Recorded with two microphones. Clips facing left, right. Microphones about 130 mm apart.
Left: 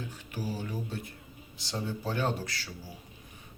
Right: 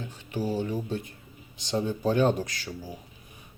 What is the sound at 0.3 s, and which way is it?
Speech, 25° right (ahead or behind).